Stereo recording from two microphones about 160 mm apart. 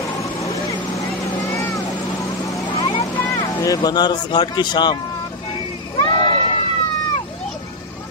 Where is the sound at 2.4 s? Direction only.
30° left (ahead or behind).